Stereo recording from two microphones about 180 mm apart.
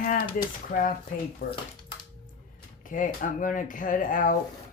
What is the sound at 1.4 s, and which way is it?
Speech, 60° left (ahead or behind).